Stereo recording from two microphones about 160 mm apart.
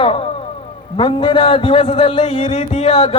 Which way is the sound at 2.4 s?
45° left (ahead or behind).